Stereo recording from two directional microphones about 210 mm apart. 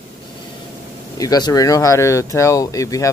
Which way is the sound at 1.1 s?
15° left (ahead or behind).